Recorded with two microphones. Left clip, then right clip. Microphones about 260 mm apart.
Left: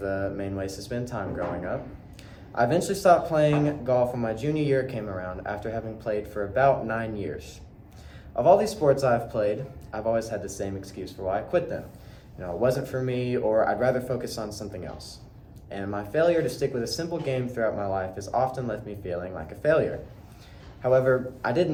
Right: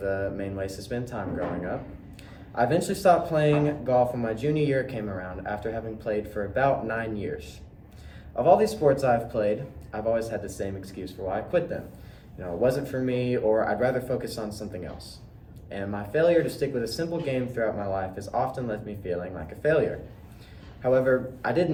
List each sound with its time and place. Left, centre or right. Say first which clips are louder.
0.0 s speech: even; centre
2.6 s speech: left 1 dB; centre